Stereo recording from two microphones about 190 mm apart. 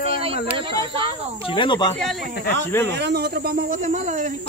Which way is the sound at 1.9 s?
5° left (ahead or behind).